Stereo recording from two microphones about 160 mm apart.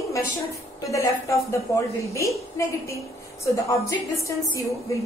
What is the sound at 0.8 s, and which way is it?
A woman's voice, 20° left (ahead or behind).